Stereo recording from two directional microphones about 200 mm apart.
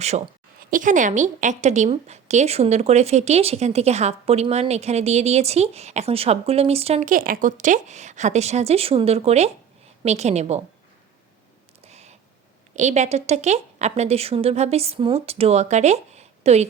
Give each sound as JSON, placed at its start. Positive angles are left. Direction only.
{"t": 0.7, "sound": "a woman's voice", "side_deg": -40}
{"t": 11.9, "sound": "a sound", "side_deg": -35}
{"t": 12.7, "sound": "a woman's voice", "side_deg": -35}